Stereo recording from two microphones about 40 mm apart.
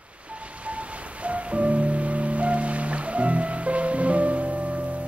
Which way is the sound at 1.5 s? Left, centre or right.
Right.